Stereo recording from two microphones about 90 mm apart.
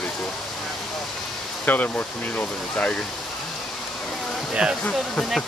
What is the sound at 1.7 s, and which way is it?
Speech, 20° left (ahead or behind).